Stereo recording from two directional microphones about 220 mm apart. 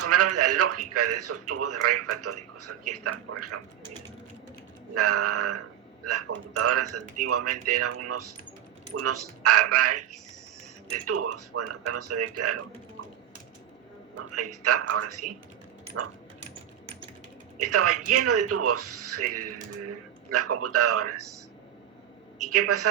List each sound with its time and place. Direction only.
0.0 s a man's voice: 90° right
4.9 s a man's voice: 90° right
14.2 s a man's voice: 90° right
17.6 s a man's voice: 90° right
22.4 s a man's voice: 90° right